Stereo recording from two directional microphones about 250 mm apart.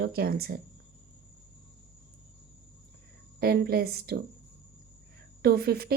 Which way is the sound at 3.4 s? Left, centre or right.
Right.